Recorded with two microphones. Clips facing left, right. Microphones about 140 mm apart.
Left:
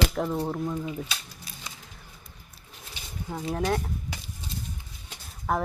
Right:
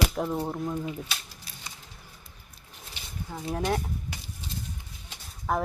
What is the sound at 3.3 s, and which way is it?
Speech, 10° left (ahead or behind).